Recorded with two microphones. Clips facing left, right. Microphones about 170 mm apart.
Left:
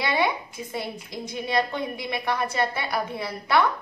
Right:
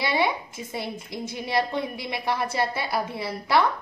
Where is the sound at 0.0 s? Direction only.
25° right (ahead or behind).